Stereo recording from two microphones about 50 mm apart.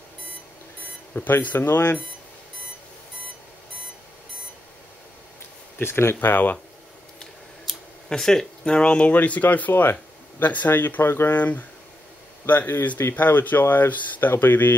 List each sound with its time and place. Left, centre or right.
1.1 s speech: left
5.8 s speech: left
6.1 s speech: left
7.7 s a sound: centre
8.1 s speech: centre
8.6 s speech: left
9.1 s speech: left
11.0 s speech: left
11.3 s speech: left
12.4 s speech: left